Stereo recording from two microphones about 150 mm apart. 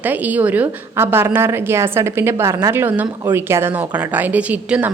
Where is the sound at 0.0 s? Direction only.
10° right (ahead or behind).